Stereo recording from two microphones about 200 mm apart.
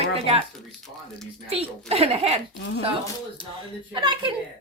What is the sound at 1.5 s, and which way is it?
Speech, 30° right (ahead or behind).